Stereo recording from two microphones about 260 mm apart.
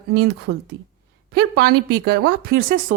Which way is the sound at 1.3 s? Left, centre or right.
Right.